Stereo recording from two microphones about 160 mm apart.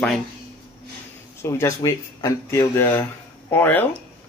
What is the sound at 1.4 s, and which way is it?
Speech, 20° left (ahead or behind).